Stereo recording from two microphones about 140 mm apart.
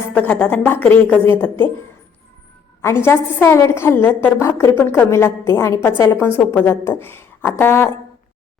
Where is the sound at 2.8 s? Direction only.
15° left (ahead or behind).